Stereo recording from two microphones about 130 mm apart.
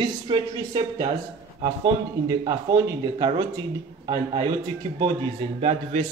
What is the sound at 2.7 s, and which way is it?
Speech, 35° right (ahead or behind).